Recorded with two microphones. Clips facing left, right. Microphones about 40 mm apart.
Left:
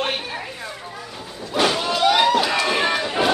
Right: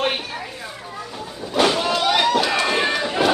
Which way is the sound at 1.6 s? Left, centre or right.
Centre.